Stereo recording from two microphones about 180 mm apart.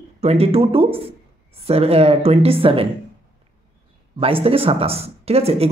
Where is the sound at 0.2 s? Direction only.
35° right (ahead or behind).